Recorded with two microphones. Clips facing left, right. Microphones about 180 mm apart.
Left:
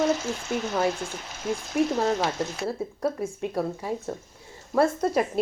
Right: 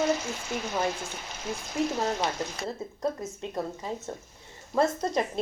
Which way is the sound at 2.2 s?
5° left (ahead or behind).